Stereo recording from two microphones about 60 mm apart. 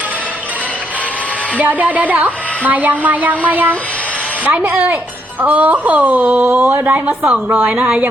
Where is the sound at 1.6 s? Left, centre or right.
Right.